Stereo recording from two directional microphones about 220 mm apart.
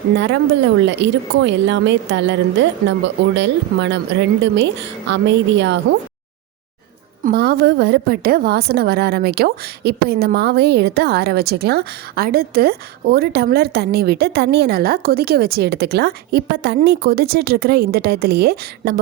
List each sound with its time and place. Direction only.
0.2 s a woman's voice: 55° right (ahead or behind)
7.3 s a woman's voice: 45° right (ahead or behind)